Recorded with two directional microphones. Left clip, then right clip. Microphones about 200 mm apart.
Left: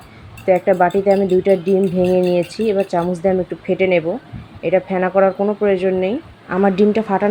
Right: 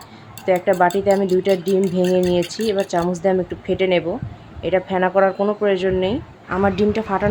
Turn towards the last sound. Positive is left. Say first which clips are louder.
# left 4 dB
turn(degrees=15)  # may be behind; listen again after turning